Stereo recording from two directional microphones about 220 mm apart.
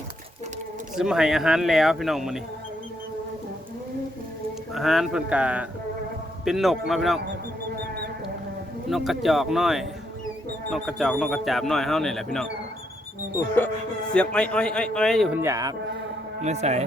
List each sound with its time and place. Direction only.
0.9 s speech: 5° right (ahead or behind)
4.7 s speech: centre (ahead or behind)
8.9 s speech: centre (ahead or behind)
14.1 s speech: 5° left (ahead or behind); by 15.7 s 15° right (ahead or behind)
16.4 s speech: 30° right (ahead or behind)